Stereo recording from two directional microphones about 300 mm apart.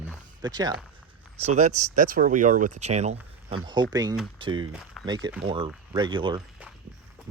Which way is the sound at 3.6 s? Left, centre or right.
Centre.